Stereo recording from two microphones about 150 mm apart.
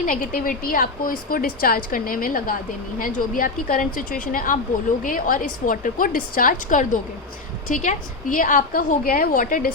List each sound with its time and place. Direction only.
0.0 s a woman's voice: 65° left (ahead or behind)